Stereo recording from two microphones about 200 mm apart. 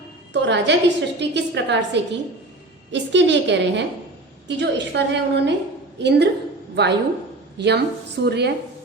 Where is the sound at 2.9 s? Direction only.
60° right (ahead or behind).